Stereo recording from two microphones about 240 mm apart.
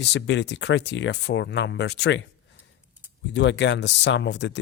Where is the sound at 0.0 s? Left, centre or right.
Left.